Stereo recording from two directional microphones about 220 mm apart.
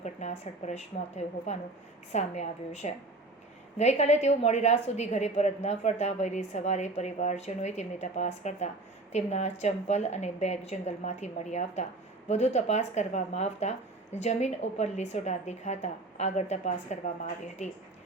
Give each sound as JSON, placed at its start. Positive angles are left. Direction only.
{"t": 0.0, "sound": "a woman's voice", "side_deg": 30}